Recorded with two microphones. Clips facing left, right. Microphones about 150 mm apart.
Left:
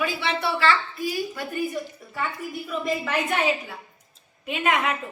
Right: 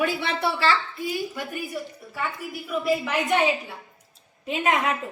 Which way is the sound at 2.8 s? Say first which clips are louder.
Right 2 dB; 15° right (ahead or behind).